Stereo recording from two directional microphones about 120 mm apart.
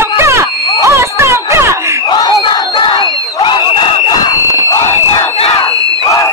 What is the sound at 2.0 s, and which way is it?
Crowd, 35° left (ahead or behind).